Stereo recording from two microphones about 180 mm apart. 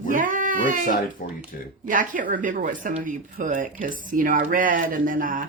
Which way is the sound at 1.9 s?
45° right (ahead or behind).